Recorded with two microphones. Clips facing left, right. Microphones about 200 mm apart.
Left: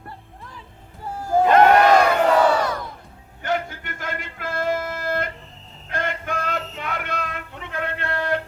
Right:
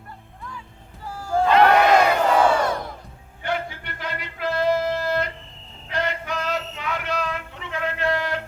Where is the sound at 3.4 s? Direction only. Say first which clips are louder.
Left 2 dB; 45° left (ahead or behind).